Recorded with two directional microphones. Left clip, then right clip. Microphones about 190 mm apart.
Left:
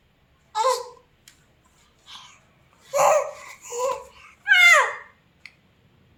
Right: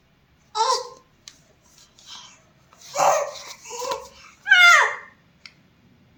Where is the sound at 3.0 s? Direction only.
25° left (ahead or behind).